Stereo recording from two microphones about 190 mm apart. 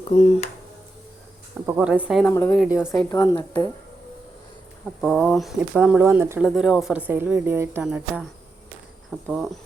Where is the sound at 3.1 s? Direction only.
20° left (ahead or behind).